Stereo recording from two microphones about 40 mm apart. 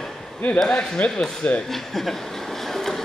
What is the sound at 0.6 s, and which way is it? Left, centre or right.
Speech, left.